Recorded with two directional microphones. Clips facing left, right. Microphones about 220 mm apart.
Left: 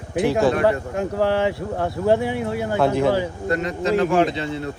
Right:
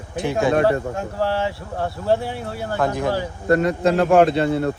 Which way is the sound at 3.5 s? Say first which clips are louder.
Right 5 dB; 55° right (ahead or behind).